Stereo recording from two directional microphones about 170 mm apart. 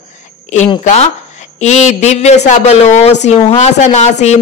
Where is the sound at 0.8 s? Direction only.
40° left (ahead or behind).